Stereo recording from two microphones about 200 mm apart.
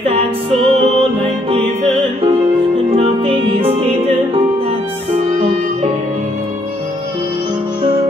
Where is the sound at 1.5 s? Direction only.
30° right (ahead or behind).